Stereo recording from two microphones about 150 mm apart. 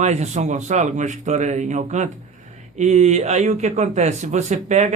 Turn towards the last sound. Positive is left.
turn(degrees=-50)  # may be behind; listen again after turning